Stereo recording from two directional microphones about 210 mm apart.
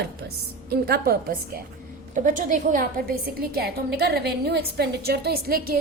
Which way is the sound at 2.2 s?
35° right (ahead or behind).